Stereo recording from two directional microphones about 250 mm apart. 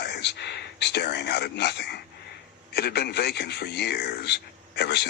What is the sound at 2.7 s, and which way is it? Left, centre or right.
Speech, left.